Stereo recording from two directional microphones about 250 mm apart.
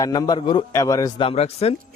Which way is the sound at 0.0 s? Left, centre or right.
Centre.